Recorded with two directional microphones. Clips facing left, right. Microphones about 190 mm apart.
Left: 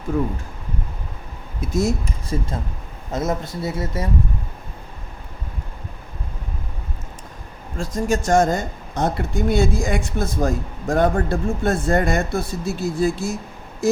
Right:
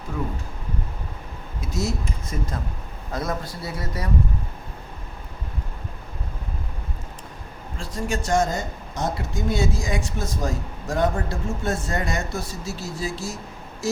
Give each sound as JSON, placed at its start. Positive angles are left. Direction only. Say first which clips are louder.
{"t": 1.6, "sound": "speech", "louder": "left 6 dB", "side_deg": 50}
{"t": 2.3, "sound": "speech", "louder": "left 6 dB", "side_deg": 30}
{"t": 7.8, "sound": "speech", "louder": "left 6 dB", "side_deg": 45}
{"t": 9.0, "sound": "speech", "louder": "left 5 dB", "side_deg": 60}